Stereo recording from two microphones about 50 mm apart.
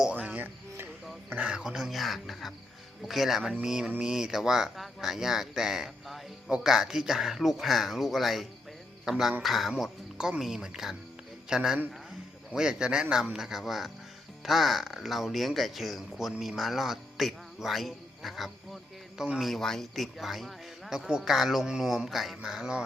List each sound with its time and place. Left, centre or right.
0.1 s a sound: right
1.4 s speech: centre
3.6 s speech: centre